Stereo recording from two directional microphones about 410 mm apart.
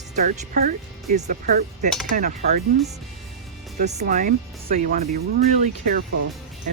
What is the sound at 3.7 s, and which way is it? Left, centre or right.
Speech, centre.